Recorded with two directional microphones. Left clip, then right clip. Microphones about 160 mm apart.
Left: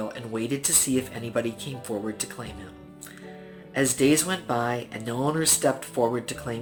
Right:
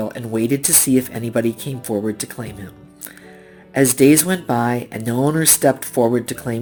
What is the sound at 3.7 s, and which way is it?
Speech, 45° right (ahead or behind).